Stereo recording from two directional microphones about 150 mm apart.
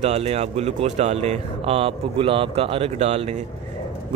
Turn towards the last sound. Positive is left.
turn(degrees=-45)  # may be behind; listen again after turning